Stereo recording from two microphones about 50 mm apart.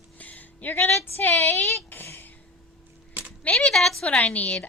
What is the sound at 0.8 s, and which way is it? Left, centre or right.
Speech, left.